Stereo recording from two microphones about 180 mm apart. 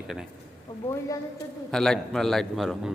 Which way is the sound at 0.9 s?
15° left (ahead or behind).